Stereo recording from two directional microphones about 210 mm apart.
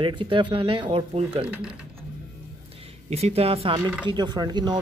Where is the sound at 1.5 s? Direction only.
5° right (ahead or behind).